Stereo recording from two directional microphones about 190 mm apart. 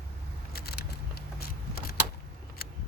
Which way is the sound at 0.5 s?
55° left (ahead or behind).